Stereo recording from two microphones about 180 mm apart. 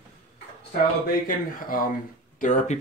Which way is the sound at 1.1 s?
50° left (ahead or behind).